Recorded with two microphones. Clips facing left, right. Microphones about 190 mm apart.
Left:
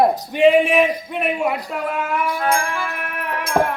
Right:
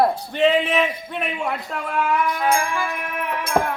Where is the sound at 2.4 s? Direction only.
15° right (ahead or behind).